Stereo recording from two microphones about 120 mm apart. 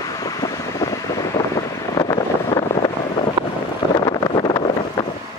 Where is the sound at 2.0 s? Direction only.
35° left (ahead or behind).